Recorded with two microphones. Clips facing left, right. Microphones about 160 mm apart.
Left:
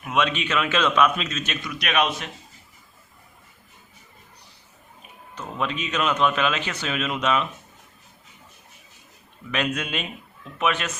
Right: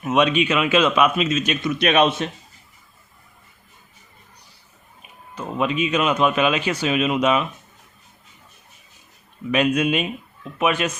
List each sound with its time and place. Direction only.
0.0 s a man's voice: 20° right (ahead or behind)
1.6 s a man's voice: 25° right (ahead or behind)
5.3 s a man's voice: 10° right (ahead or behind)
9.5 s a man's voice: 10° right (ahead or behind)